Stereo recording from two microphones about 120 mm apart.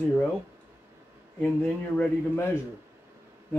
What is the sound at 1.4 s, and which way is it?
Speech, 10° left (ahead or behind).